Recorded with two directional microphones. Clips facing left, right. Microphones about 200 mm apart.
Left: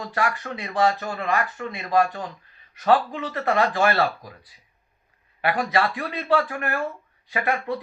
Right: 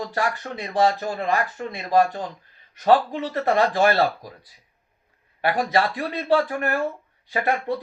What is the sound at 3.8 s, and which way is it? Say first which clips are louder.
Speech: right 2 dB; 35° right (ahead or behind).